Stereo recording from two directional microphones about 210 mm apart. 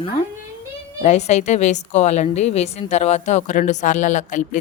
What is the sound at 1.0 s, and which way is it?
A woman's voice, 30° left (ahead or behind).